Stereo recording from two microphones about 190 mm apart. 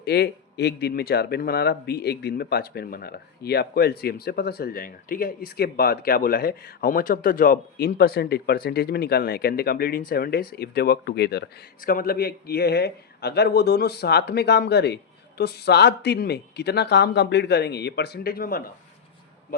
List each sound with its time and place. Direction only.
0.0 s speech: 60° left (ahead or behind)